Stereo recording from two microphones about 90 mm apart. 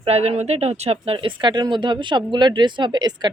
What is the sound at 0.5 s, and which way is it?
Speech, 90° right.